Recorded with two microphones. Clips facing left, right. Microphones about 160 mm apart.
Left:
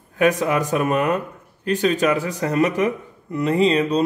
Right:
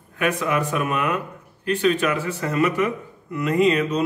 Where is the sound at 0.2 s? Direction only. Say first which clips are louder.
Left 4 dB; 40° left (ahead or behind).